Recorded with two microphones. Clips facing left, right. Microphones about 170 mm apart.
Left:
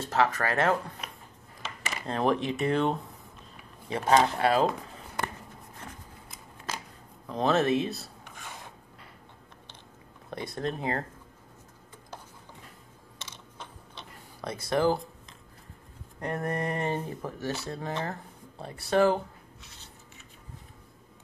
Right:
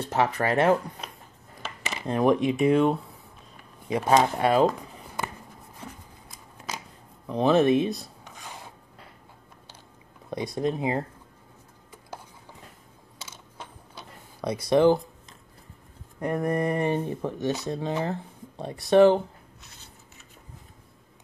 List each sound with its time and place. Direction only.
0.0 s speech: 20° right (ahead or behind)
2.0 s speech: 15° right (ahead or behind)
4.1 s speech: 20° right (ahead or behind)
7.2 s speech: 15° right (ahead or behind)
10.3 s speech: 15° right (ahead or behind)
13.2 s a sound: 5° right (ahead or behind)
14.7 s speech: 20° right (ahead or behind)
16.2 s speech: 10° right (ahead or behind)